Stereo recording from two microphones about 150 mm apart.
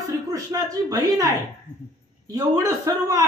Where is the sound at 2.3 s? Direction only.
20° right (ahead or behind).